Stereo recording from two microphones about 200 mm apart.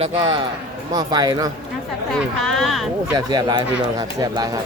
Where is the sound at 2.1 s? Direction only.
Centre (ahead or behind).